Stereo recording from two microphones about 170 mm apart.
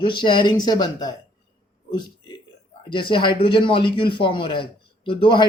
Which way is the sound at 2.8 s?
30° left (ahead or behind).